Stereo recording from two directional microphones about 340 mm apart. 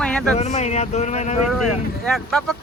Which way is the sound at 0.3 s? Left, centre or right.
Centre.